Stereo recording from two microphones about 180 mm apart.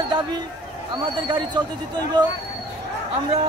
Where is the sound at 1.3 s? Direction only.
25° right (ahead or behind).